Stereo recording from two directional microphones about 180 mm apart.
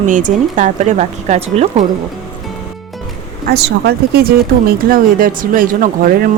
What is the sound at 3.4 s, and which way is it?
Speech, 60° right (ahead or behind).